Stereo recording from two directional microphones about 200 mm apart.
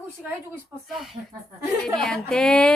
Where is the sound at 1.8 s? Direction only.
Centre (ahead or behind).